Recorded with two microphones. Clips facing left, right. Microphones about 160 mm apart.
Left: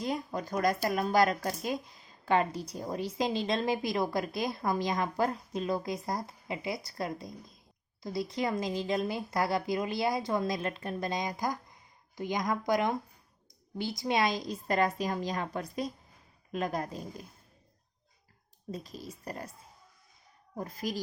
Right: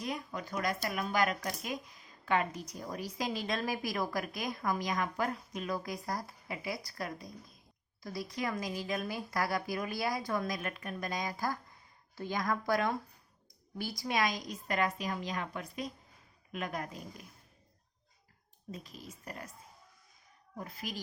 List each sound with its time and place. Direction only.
0.0 s a woman's voice: 35° left (ahead or behind)
18.7 s a woman's voice: 35° left (ahead or behind)
20.6 s a woman's voice: 40° left (ahead or behind)